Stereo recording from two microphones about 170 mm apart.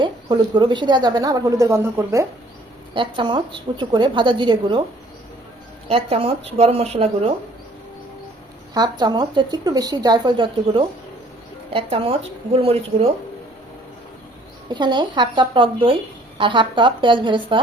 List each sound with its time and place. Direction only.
0.0 s a woman's voice: 25° right (ahead or behind)
2.9 s a woman's voice: 30° right (ahead or behind)
5.9 s speech: 35° right (ahead or behind)
8.7 s a woman's voice: 25° right (ahead or behind)
14.7 s a woman's voice: 25° right (ahead or behind)